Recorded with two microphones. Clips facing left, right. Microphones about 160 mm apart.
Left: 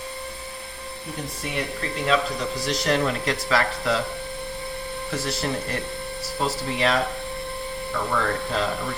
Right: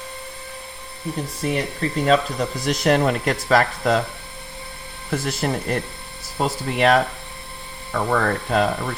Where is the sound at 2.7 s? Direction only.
50° right (ahead or behind).